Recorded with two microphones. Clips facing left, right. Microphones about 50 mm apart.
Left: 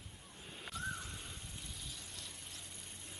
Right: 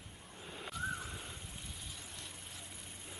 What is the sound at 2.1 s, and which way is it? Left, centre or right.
Vehicle, centre.